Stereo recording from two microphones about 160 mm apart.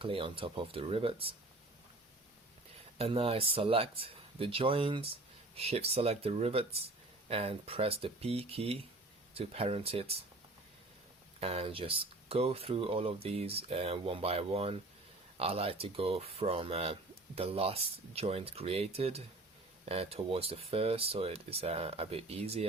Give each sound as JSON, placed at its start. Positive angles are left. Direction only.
{"t": 0.0, "sound": "speech", "side_deg": -35}
{"t": 3.0, "sound": "speech", "side_deg": -35}
{"t": 11.3, "sound": "speech", "side_deg": -40}